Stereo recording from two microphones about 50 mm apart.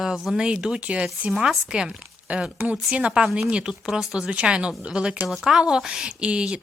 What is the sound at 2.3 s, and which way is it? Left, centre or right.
A woman's voice, right.